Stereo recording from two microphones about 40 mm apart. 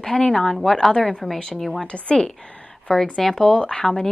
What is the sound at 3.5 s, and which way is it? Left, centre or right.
Speech, left.